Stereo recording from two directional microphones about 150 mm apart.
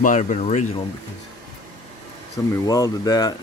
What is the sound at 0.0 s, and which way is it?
Speech, 55° left (ahead or behind).